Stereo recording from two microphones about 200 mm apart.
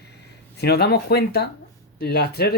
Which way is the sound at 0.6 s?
55° left (ahead or behind).